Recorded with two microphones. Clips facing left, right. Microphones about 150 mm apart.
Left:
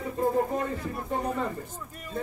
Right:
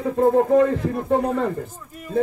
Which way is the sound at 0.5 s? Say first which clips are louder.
Right 13 dB; 75° right (ahead or behind).